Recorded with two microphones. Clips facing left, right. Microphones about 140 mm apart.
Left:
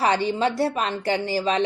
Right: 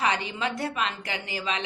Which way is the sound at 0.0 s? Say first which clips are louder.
Left 7 dB; 35° left (ahead or behind).